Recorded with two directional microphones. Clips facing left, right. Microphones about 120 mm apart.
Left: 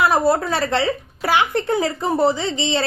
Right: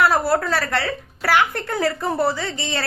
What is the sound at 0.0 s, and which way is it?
A woman's voice, 20° left (ahead or behind).